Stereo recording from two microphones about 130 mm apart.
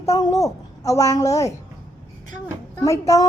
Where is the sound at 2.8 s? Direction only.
25° left (ahead or behind).